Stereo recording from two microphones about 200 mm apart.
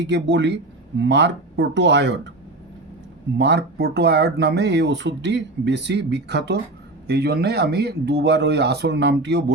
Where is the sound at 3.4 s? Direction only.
55° right (ahead or behind).